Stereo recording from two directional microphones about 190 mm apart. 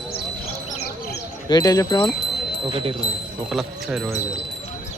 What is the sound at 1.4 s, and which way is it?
Speech, 20° left (ahead or behind).